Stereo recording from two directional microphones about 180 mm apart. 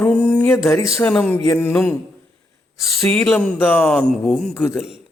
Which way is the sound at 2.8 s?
5° left (ahead or behind).